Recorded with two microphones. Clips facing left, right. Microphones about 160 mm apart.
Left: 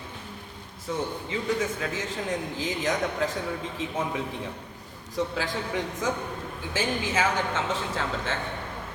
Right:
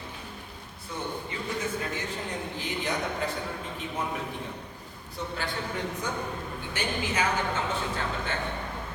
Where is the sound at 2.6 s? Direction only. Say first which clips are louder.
Left 3 dB; 90° left.